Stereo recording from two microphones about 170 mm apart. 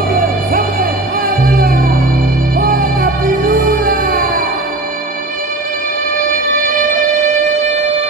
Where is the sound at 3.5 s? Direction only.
55° right (ahead or behind).